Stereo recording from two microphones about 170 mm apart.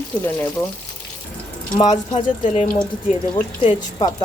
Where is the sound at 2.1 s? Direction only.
45° left (ahead or behind).